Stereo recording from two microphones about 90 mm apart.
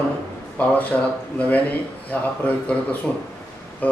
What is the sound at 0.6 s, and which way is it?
Speech, 15° left (ahead or behind).